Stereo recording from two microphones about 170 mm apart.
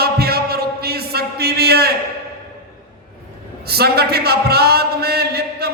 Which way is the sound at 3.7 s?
70° right (ahead or behind).